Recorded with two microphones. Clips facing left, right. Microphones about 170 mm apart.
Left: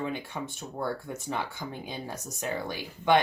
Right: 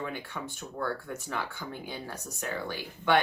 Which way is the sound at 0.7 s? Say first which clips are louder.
Left 1 dB; 20° left (ahead or behind).